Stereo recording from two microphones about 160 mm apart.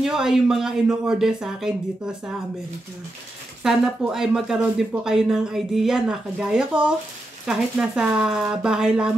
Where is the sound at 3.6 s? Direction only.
Centre (ahead or behind).